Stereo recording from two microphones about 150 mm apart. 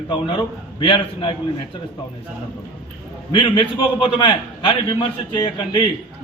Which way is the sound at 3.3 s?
30° left (ahead or behind).